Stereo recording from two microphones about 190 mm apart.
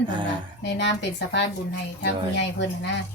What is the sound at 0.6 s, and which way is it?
Speech, 65° left (ahead or behind).